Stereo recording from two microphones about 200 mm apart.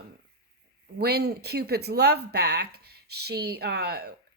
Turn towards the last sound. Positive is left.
turn(degrees=-50)  # may be behind; listen again after turning